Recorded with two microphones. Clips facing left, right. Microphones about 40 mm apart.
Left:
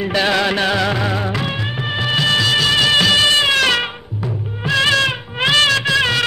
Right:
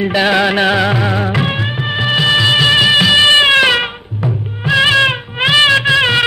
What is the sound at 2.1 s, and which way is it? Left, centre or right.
Music, centre.